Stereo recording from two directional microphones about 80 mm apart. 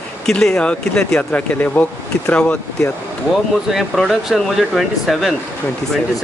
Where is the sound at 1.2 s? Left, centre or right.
Centre.